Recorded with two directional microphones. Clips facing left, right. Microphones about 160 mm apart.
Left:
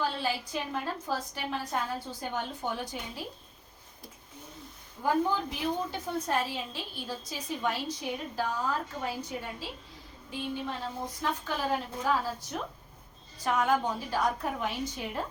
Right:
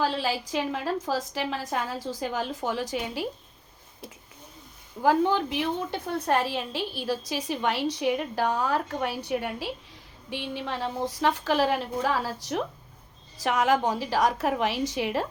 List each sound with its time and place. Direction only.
0.0 s a woman's voice: 90° right
5.0 s a woman's voice: 90° right; by 9.6 s 75° right (ahead or behind)
10.2 s a woman's voice: 85° right